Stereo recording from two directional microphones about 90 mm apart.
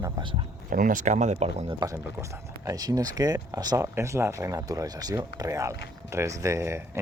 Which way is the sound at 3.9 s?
30° right (ahead or behind).